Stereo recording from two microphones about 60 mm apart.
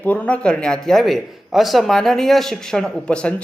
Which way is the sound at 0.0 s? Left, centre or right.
Left.